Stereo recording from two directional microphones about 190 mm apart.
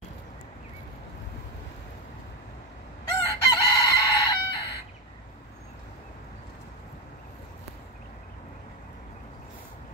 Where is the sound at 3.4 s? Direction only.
20° left (ahead or behind).